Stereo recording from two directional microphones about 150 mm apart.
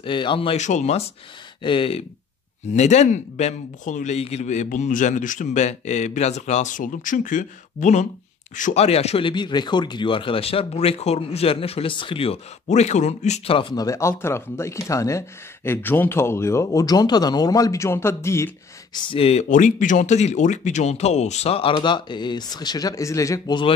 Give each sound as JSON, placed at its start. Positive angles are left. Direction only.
{"t": 0.0, "sound": "speech", "side_deg": 35}
{"t": 0.6, "sound": "speech", "side_deg": 50}
{"t": 1.6, "sound": "speech", "side_deg": 35}
{"t": 2.7, "sound": "speech", "side_deg": 50}
{"t": 13.6, "sound": "speech", "side_deg": 30}
{"t": 18.9, "sound": "speech", "side_deg": 35}
{"t": 19.5, "sound": "speech", "side_deg": 60}